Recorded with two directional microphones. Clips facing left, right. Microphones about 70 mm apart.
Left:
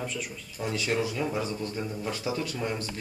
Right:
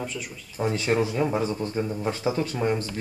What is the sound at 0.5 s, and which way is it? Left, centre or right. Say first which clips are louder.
Speech: right 5 dB; right.